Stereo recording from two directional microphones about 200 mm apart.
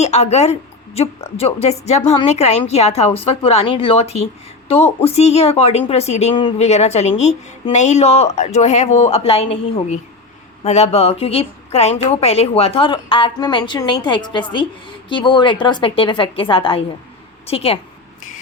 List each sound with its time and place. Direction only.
0.0 s a woman's voice: 35° left (ahead or behind)